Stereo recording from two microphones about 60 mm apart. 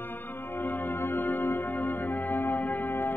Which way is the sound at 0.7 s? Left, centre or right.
Left.